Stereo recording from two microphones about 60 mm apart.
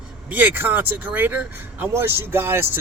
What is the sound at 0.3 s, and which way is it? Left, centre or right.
Speech, right.